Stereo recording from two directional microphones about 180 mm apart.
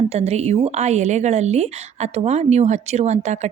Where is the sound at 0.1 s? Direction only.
35° right (ahead or behind).